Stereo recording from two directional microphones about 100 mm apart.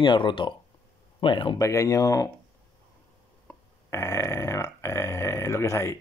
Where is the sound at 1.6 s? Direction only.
30° left (ahead or behind).